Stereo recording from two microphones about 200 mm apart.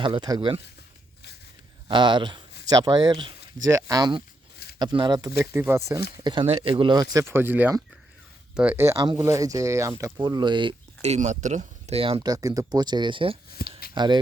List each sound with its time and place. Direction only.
0.0 s speech: 25° right (ahead or behind)
1.9 s speech: 25° right (ahead or behind)
13.6 s a sound: 50° left (ahead or behind)
13.9 s speech: 20° right (ahead or behind)